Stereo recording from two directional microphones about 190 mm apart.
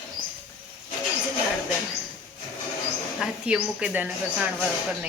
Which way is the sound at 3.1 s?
5° right (ahead or behind).